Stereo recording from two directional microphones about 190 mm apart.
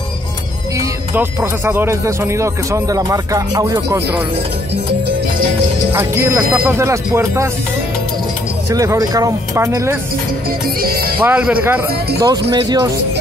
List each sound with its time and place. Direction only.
0.7 s speech: 15° right (ahead or behind)
5.9 s speech: 15° right (ahead or behind)
8.6 s speech: 15° right (ahead or behind)
10.8 s music: 50° right (ahead or behind)
11.2 s speech: 10° right (ahead or behind)
12.2 s speech: 20° right (ahead or behind)